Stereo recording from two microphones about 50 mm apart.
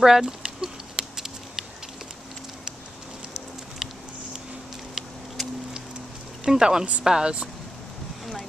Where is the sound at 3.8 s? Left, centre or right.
Centre.